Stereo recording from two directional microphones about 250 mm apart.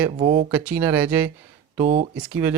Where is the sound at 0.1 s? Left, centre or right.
Right.